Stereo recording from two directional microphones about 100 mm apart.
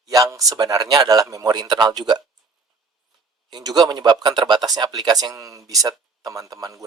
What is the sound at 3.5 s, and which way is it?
Speech, 40° right (ahead or behind).